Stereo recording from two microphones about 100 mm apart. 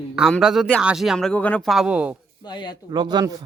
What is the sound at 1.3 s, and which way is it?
Speech, 15° left (ahead or behind).